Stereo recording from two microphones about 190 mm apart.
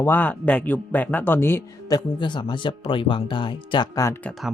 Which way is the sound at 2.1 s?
25° left (ahead or behind).